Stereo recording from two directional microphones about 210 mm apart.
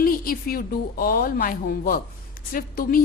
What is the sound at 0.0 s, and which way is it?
A woman's voice, 45° left (ahead or behind).